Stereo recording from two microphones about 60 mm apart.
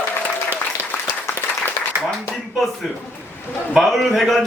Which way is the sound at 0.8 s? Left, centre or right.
Right.